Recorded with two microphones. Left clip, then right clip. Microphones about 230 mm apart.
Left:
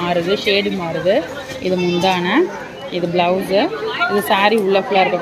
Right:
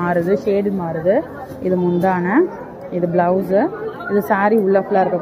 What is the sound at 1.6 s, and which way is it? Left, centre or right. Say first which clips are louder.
Speech: left 1 dB; centre.